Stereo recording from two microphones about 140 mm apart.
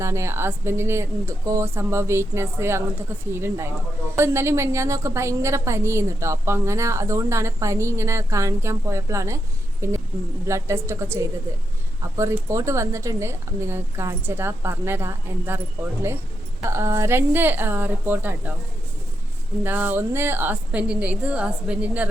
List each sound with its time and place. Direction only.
0.0 s a woman's voice: 20° right (ahead or behind)
12.5 s a woman's voice: 20° right (ahead or behind)
19.6 s a woman's voice: 15° right (ahead or behind)